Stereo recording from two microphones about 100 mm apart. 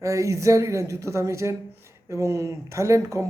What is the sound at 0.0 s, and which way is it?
Speech, 30° right (ahead or behind).